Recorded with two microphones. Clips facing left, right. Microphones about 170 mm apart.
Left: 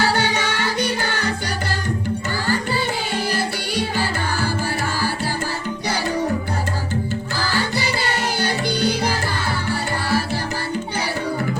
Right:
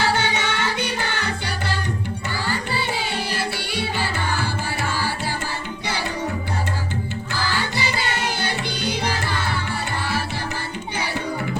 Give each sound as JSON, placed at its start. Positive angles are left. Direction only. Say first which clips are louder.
{"t": 0.0, "sound": "music", "louder": "left 2 dB", "side_deg": 40}
{"t": 3.3, "sound": "music", "louder": "left 3 dB", "side_deg": 40}
{"t": 7.5, "sound": "music", "louder": "left 4 dB", "side_deg": 40}